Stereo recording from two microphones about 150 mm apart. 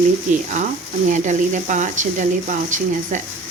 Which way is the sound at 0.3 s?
60° right (ahead or behind).